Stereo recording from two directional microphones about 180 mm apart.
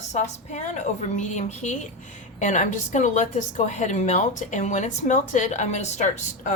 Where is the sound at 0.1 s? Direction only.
40° left (ahead or behind).